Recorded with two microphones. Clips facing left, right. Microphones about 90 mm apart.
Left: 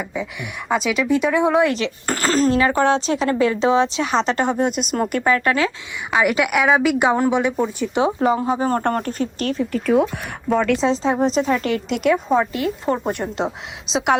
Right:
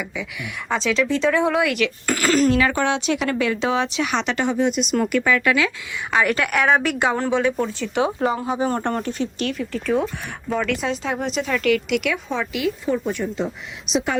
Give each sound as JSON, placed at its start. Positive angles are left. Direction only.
{"t": 0.0, "sound": "speech", "side_deg": 35}
{"t": 0.7, "sound": "speech", "side_deg": 10}
{"t": 2.0, "sound": "speech", "side_deg": 35}
{"t": 6.1, "sound": "a woman's voice", "side_deg": 10}
{"t": 7.0, "sound": "speech", "side_deg": 15}
{"t": 8.5, "sound": "speech", "side_deg": 40}
{"t": 9.7, "sound": "a woman's voice", "side_deg": 5}
{"t": 10.7, "sound": "speech", "side_deg": 25}
{"t": 12.8, "sound": "speech", "side_deg": 60}